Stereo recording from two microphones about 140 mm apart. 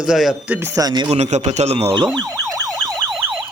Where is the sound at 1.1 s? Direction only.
55° right (ahead or behind); by 2.9 s 25° right (ahead or behind).